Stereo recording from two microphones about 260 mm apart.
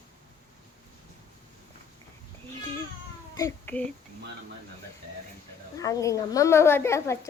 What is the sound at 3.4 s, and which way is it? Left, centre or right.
Speech, centre.